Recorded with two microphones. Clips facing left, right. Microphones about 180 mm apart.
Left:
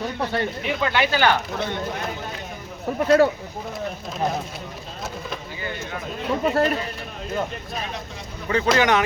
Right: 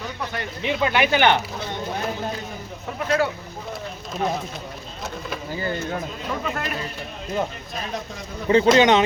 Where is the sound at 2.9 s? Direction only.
40° left (ahead or behind).